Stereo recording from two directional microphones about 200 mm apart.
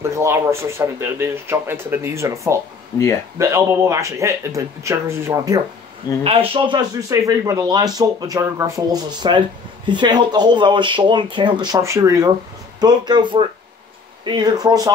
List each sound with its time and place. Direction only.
0.0 s speech: 15° right (ahead or behind)
6.2 s speech: 30° right (ahead or behind)